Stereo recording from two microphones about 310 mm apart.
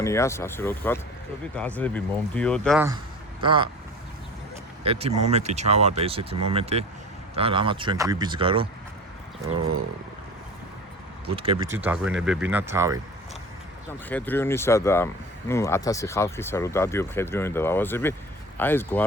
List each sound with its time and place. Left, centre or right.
0.0 s speech: centre
3.4 s speech: centre
4.8 s speech: centre
11.3 s speech: centre
14.1 s speech: centre